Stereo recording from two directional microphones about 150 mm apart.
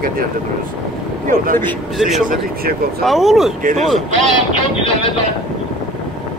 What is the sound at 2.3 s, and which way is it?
Speech, 90° right.